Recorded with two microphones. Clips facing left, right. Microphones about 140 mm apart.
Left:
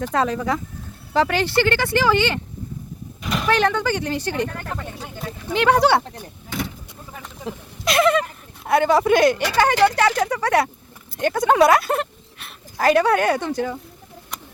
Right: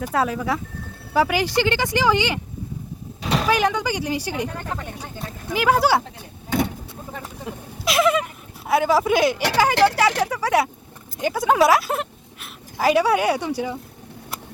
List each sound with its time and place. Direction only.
0.0 s speech: 5° right (ahead or behind)
3.2 s a sound: 35° right (ahead or behind)
3.4 s speech: 10° right (ahead or behind)
7.5 s speech: 25° left (ahead or behind)
7.9 s speech: centre (ahead or behind)